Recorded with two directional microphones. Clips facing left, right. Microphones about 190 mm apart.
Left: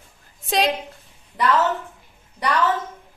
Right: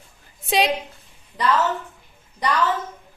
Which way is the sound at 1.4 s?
Centre (ahead or behind).